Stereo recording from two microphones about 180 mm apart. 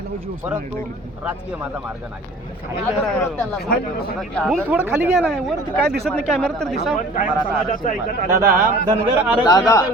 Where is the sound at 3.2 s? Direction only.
5° left (ahead or behind).